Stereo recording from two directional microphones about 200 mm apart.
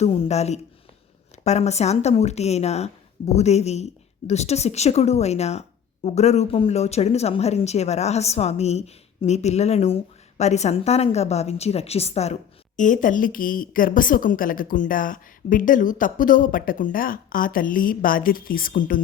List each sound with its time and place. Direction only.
0.0 s a woman's voice: 30° left (ahead or behind); by 19.0 s 45° left (ahead or behind)